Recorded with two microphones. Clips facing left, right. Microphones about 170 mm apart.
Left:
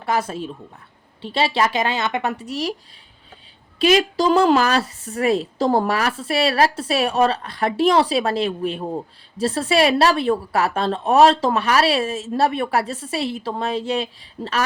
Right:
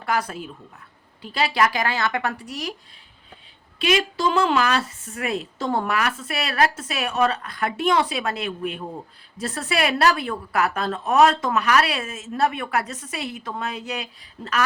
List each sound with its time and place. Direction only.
0.0 s a woman's voice: 25° left (ahead or behind)
3.8 s a woman's voice: 40° left (ahead or behind)